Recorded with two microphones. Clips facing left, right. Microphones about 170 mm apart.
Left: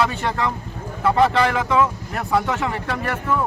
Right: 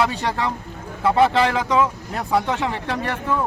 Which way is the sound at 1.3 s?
25° right (ahead or behind).